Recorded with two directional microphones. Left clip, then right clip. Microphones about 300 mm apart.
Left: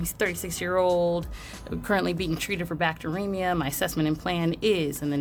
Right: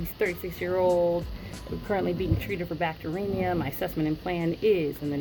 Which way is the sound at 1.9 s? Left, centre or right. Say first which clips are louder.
Left 2 dB; left.